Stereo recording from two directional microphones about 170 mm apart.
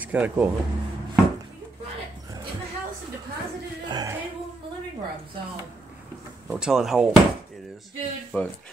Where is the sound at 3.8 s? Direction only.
25° right (ahead or behind).